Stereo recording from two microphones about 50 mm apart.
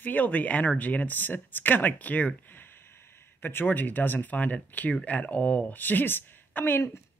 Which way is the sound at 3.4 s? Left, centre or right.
Left.